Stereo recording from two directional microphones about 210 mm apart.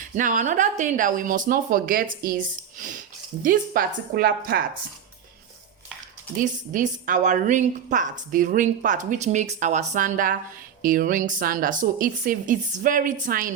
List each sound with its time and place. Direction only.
0.2 s a woman's voice: 40° right (ahead or behind)
6.3 s a woman's voice: 40° right (ahead or behind)